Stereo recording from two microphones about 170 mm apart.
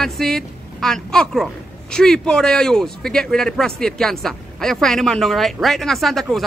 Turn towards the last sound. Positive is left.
turn(degrees=0)  # may be behind; listen again after turning